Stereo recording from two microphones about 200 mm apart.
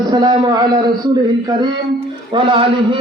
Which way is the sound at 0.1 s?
20° right (ahead or behind).